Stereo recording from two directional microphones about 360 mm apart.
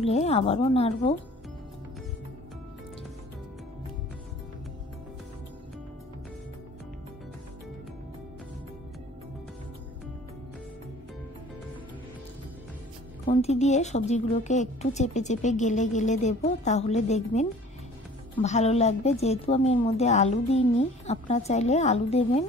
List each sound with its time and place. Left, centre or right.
0.0 s a woman's voice: centre
13.2 s a woman's voice: left